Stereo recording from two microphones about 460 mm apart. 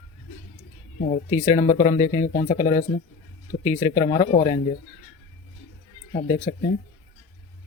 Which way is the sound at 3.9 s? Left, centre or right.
Centre.